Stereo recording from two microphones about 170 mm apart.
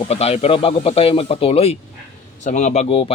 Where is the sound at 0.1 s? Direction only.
35° left (ahead or behind).